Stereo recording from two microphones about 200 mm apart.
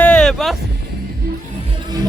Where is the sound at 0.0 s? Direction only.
5° left (ahead or behind).